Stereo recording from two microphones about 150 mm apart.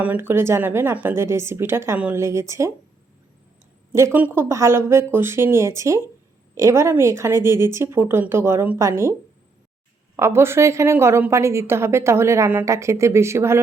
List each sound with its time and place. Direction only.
0.0 s a woman's voice: 15° right (ahead or behind)
3.9 s a woman's voice: 15° right (ahead or behind)
10.2 s a woman's voice: 15° right (ahead or behind)